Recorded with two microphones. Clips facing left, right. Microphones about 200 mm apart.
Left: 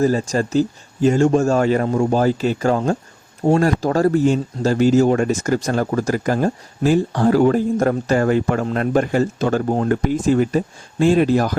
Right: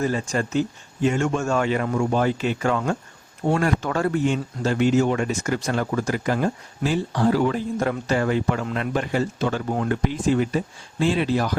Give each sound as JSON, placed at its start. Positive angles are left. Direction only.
{"t": 0.0, "sound": "speech", "side_deg": 40}